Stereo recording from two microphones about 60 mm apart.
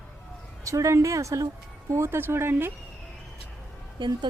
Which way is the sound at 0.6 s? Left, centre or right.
Right.